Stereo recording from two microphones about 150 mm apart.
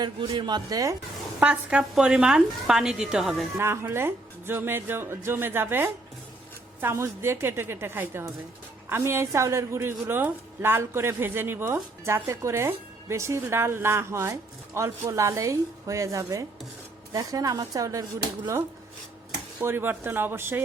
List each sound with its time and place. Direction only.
0.0 s a woman's voice: 30° right (ahead or behind)
1.4 s a woman's voice: 5° right (ahead or behind)
3.6 s a woman's voice: 15° right (ahead or behind)
19.6 s a woman's voice: 15° right (ahead or behind)